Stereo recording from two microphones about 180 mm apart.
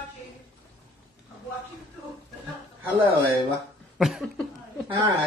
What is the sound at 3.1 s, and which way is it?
Speech, 30° right (ahead or behind).